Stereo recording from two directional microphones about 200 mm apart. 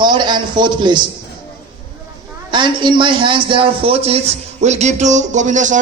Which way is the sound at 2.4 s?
25° right (ahead or behind).